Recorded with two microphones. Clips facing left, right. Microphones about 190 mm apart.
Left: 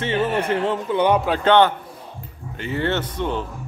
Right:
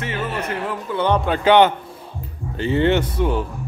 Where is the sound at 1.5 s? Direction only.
15° right (ahead or behind).